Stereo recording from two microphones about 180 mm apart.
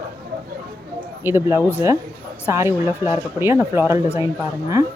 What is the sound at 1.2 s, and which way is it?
Speech, 15° right (ahead or behind).